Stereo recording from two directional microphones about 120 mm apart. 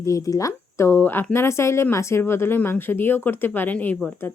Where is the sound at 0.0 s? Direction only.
30° left (ahead or behind).